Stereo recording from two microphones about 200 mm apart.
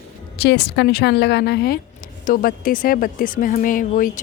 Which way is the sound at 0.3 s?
55° left (ahead or behind).